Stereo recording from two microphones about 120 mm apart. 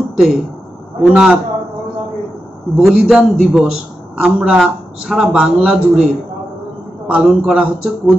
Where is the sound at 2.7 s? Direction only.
5° right (ahead or behind).